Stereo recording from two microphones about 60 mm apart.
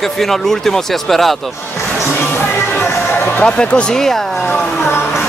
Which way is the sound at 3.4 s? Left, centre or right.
Centre.